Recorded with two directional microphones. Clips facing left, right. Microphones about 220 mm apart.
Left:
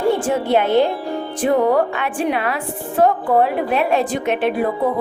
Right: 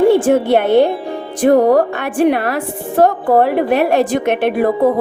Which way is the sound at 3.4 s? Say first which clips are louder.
Right 5 dB; 65° right (ahead or behind).